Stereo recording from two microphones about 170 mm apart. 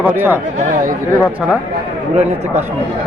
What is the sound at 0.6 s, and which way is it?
Speech, 50° right (ahead or behind).